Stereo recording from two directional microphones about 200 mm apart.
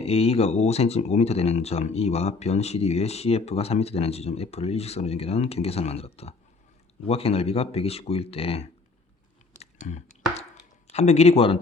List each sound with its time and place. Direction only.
0.0 s speech: 30° left (ahead or behind)
9.6 s a sound: 35° left (ahead or behind)
10.8 s speech: 30° left (ahead or behind)